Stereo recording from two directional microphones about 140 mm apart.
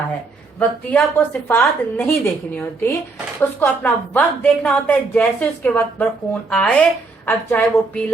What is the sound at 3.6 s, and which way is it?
A woman's voice, 10° left (ahead or behind).